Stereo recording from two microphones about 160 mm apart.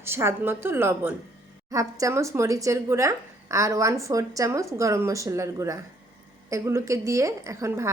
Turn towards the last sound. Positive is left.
turn(degrees=-20)  # may be behind; listen again after turning